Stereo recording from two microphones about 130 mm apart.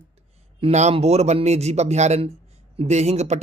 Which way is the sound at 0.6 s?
60° right (ahead or behind).